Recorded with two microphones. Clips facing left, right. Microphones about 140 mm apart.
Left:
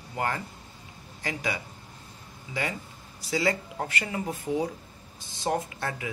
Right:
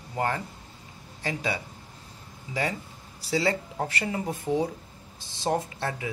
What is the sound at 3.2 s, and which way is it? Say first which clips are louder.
Speech: right 1 dB; 30° right (ahead or behind).